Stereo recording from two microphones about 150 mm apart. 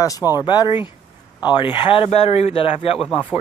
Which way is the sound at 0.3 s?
25° left (ahead or behind).